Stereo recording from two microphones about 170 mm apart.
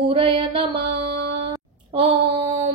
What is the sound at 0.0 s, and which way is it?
Speech, 35° right (ahead or behind).